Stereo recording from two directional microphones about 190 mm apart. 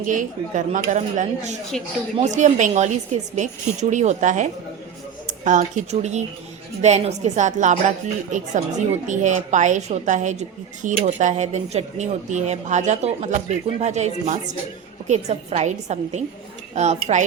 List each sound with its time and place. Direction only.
0.0 s speech: 40° right (ahead or behind)
1.7 s speech: 5° left (ahead or behind)
2.1 s speech: 40° right (ahead or behind)